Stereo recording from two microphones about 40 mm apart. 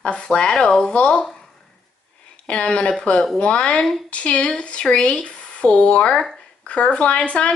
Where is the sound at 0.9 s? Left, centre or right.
Left.